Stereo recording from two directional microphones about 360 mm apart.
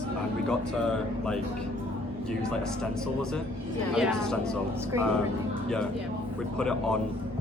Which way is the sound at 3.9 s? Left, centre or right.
Centre.